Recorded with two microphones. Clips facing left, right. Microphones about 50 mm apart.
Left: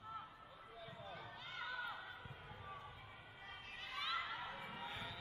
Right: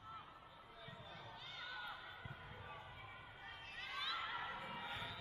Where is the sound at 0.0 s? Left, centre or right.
Centre.